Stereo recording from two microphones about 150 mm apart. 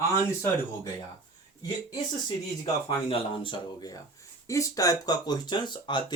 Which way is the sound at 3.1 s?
35° left (ahead or behind).